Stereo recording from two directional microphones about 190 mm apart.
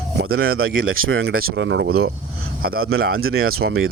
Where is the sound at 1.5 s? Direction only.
75° right (ahead or behind); by 2.1 s 60° right (ahead or behind).